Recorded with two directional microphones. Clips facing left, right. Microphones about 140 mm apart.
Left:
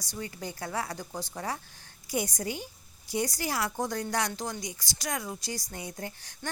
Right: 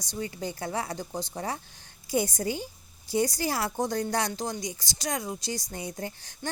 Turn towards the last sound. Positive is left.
turn(degrees=-30)  # may be behind; listen again after turning